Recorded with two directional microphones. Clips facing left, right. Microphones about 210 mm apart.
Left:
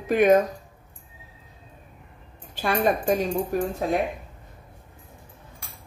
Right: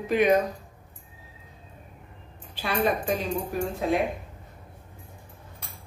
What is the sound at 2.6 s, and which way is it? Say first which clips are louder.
Speech: left 3 dB; 45° left (ahead or behind).